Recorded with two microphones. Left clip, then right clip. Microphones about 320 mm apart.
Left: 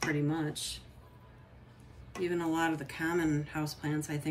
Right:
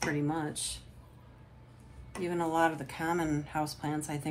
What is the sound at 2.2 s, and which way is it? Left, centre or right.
Speech, centre.